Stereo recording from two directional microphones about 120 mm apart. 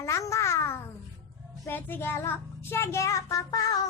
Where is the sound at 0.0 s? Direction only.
25° left (ahead or behind).